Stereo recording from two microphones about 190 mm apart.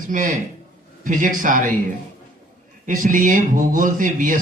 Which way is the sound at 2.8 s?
45° right (ahead or behind).